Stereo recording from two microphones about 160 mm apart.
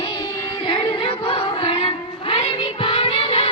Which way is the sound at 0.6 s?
30° left (ahead or behind).